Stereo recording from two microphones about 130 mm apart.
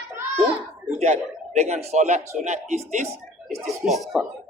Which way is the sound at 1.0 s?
65° right (ahead or behind).